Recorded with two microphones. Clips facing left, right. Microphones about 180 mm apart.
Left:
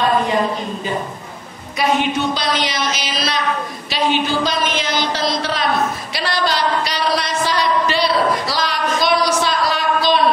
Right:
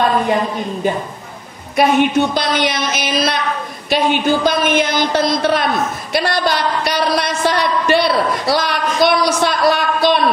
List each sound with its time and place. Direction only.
1.8 s a woman's voice: 55° right (ahead or behind)